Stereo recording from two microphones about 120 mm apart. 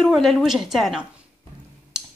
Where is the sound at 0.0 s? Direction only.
Centre (ahead or behind).